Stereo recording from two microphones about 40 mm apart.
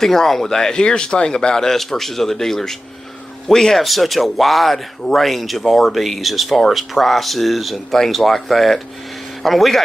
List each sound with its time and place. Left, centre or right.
0.0 s speech: centre